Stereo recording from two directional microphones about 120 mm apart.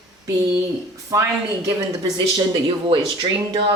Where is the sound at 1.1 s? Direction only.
30° right (ahead or behind).